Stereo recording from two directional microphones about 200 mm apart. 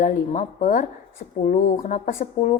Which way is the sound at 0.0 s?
40° left (ahead or behind).